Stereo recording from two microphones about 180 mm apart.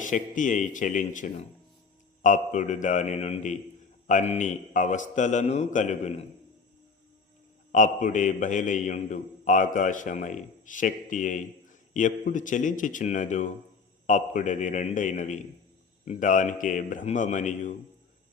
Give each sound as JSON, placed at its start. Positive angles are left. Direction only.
{"t": 0.0, "sound": "a man's voice", "side_deg": 45}
{"t": 7.7, "sound": "a man's voice", "side_deg": 45}